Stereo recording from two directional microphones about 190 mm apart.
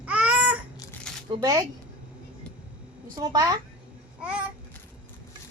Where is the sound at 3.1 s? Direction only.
20° right (ahead or behind).